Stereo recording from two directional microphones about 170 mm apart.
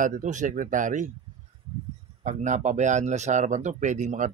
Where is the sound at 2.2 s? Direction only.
45° right (ahead or behind).